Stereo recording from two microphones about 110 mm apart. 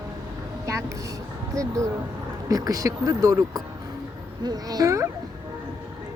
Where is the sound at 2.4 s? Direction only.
30° right (ahead or behind).